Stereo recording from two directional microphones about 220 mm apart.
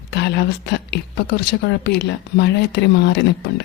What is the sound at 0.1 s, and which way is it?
Speech, 50° left (ahead or behind).